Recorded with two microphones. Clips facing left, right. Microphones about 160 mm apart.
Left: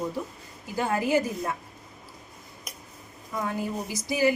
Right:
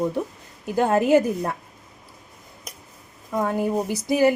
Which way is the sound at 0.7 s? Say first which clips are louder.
Right 7 dB; 65° right (ahead or behind).